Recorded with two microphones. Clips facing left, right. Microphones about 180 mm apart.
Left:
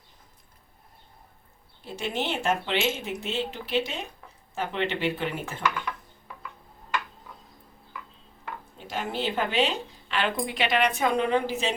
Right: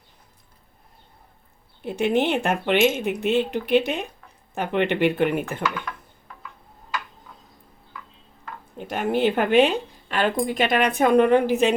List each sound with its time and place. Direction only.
1.8 s a woman's voice: 60° right (ahead or behind)
8.8 s a woman's voice: 60° right (ahead or behind)